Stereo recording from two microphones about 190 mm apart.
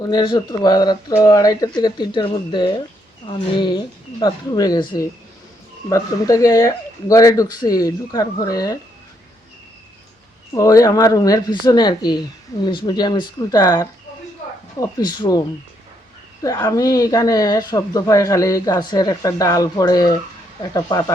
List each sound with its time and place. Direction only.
0.0 s speech: 25° left (ahead or behind)
10.5 s speech: 15° left (ahead or behind)